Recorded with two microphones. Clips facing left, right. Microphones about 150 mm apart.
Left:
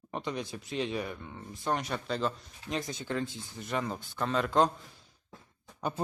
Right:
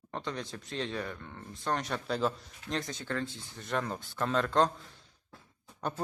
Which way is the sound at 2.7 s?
10° left (ahead or behind).